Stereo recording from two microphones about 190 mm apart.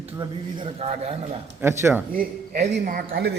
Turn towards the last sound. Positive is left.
turn(degrees=-70)  # may be behind; listen again after turning